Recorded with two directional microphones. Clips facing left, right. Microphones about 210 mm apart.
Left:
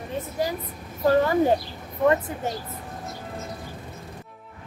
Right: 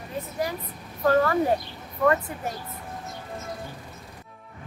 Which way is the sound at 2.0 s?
20° left (ahead or behind).